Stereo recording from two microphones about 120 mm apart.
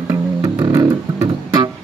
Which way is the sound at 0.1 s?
25° right (ahead or behind).